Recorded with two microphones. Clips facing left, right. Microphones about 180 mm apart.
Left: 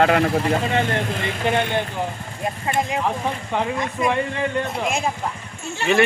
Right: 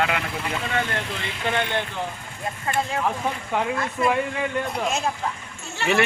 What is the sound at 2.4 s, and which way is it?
Speech, 20° left (ahead or behind).